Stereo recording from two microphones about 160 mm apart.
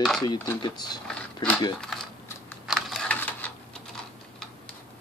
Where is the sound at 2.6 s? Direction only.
Centre (ahead or behind).